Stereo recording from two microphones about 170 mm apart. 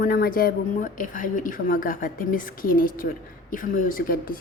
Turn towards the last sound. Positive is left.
turn(degrees=55)  # may be behind; listen again after turning